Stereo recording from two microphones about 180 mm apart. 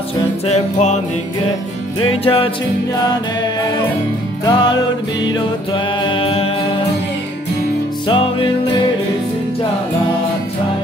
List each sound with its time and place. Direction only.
0.5 s music: 40° left (ahead or behind)
2.0 s music: 30° left (ahead or behind)
4.5 s music: 25° left (ahead or behind)
8.1 s music: 30° left (ahead or behind)